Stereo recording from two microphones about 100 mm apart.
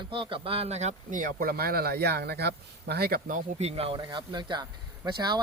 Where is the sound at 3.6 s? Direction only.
85° right.